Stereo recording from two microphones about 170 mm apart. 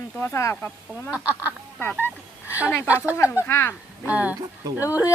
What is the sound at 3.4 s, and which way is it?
Speech, 15° left (ahead or behind).